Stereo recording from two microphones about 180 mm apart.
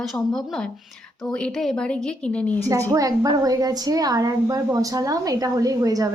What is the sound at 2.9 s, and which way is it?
A woman's voice, 20° right (ahead or behind).